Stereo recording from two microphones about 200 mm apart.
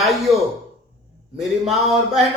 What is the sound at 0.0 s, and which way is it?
Speech, centre (ahead or behind).